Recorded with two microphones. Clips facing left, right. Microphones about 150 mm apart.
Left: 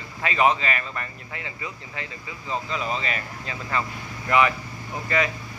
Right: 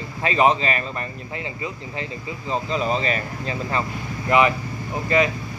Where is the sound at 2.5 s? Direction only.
30° right (ahead or behind).